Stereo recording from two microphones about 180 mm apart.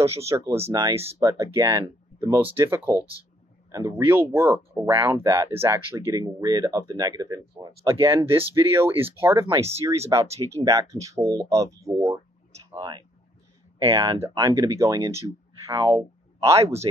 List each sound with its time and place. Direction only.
0.0 s speech: 15° right (ahead or behind)
9.5 s speech: 35° right (ahead or behind)
10.1 s speech: 20° right (ahead or behind)